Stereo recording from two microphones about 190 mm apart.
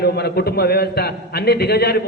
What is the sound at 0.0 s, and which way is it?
A man's voice, 55° left (ahead or behind).